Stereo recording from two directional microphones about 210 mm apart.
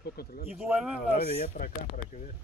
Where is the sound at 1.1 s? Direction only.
30° left (ahead or behind).